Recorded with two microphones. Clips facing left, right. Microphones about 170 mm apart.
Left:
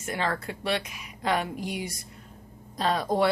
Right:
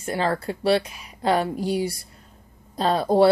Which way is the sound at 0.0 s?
30° right (ahead or behind).